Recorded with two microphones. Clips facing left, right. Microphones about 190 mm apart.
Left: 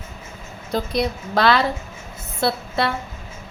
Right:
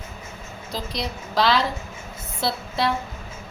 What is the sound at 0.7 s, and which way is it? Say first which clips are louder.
A woman's voice: left 8 dB; 60° left (ahead or behind).